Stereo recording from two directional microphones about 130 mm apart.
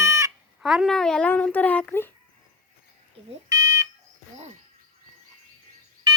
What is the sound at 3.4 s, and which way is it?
Fire alarm, 25° right (ahead or behind).